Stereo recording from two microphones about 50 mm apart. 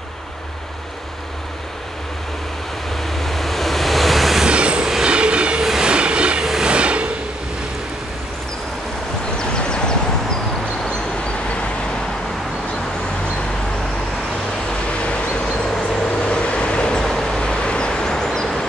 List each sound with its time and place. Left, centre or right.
3.0 s waves: centre
4.5 s train: right
5.6 s train: centre
5.9 s train: right
6.4 s train: centre
6.7 s a sound: right
9.4 s vehicle: centre
14.7 s vehicle: left